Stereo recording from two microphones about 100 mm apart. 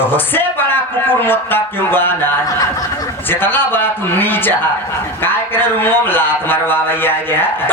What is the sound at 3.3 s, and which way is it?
Speech, 20° left (ahead or behind).